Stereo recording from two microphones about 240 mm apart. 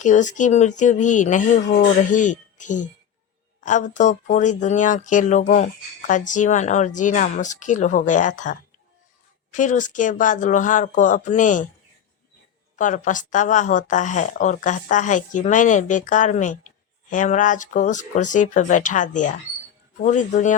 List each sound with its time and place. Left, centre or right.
0.0 s speech: left
12.7 s speech: left